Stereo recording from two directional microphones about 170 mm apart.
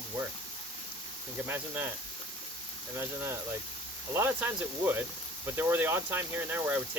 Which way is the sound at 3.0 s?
15° right (ahead or behind).